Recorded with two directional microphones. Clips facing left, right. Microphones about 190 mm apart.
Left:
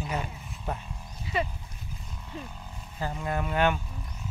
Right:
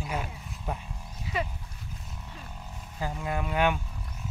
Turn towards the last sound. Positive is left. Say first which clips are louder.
# left 1 dB
turn(degrees=-5)  # may be behind; listen again after turning